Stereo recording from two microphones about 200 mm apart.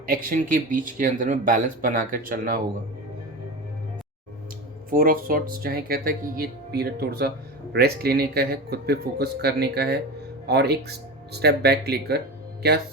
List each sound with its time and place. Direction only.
0.0 s speech: 45° right (ahead or behind)
4.9 s speech: 45° right (ahead or behind)